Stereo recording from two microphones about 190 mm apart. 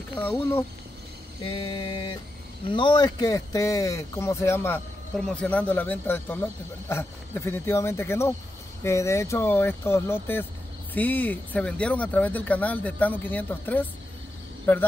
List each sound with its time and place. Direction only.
0.1 s speech: 10° left (ahead or behind)
1.4 s mantra: 30° left (ahead or behind)
2.7 s speech: 25° left (ahead or behind)